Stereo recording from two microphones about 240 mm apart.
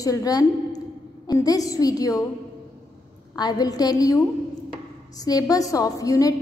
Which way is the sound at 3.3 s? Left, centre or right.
Centre.